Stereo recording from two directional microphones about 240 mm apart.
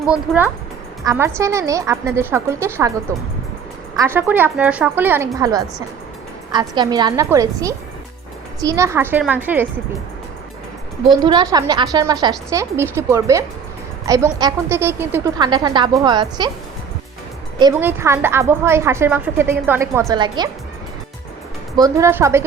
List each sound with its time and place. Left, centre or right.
0.0 s a woman's voice: centre
3.9 s a woman's voice: centre
11.1 s a woman's voice: centre
17.6 s a woman's voice: centre
21.8 s a woman's voice: centre